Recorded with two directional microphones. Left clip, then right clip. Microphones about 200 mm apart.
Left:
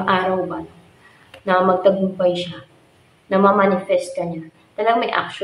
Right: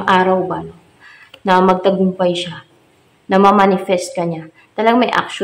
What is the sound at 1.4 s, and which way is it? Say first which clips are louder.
Speech: right 3 dB; 30° right (ahead or behind).